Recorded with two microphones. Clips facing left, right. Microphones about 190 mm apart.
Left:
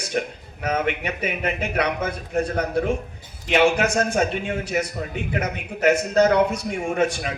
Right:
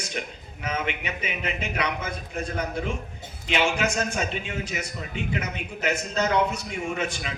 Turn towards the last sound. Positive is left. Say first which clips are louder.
# left 7 dB
turn(degrees=55)  # may be behind; listen again after turning